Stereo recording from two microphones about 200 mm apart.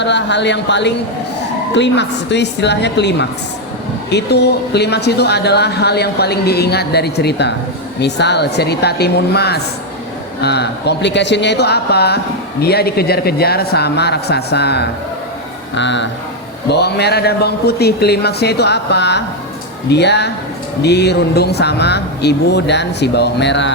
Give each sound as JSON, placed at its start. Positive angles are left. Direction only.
{"t": 0.0, "sound": "speech", "side_deg": 60}